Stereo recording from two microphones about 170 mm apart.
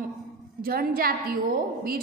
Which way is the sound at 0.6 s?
60° right (ahead or behind).